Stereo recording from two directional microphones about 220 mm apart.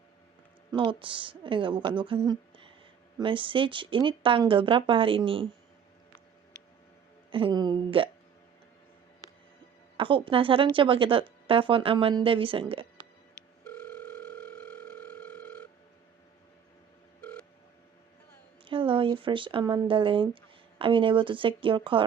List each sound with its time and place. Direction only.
0.7 s speech: 20° right (ahead or behind)
7.3 s speech: 25° right (ahead or behind)
10.0 s speech: 25° right (ahead or behind)
13.7 s dial tone: 5° left (ahead or behind)
17.2 s telephone: 5° left (ahead or behind)
18.6 s speech: 25° right (ahead or behind)